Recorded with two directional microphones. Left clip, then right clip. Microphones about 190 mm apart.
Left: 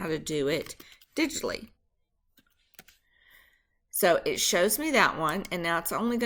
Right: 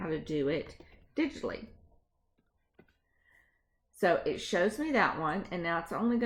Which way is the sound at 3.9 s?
15° left (ahead or behind).